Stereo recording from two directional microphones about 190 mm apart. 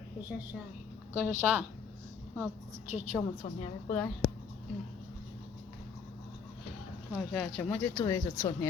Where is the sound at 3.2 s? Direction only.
5° left (ahead or behind).